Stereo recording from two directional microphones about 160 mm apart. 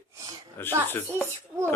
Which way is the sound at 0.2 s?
25° right (ahead or behind).